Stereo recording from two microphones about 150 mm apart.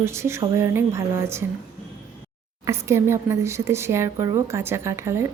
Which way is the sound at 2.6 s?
20° right (ahead or behind).